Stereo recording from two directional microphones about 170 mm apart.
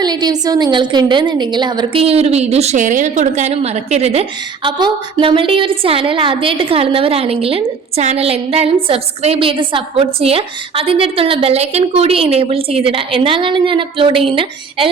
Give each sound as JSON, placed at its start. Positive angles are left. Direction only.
{"t": 0.0, "sound": "a woman's voice", "side_deg": -25}